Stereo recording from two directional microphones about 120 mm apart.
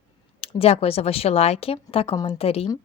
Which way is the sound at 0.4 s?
55° left (ahead or behind).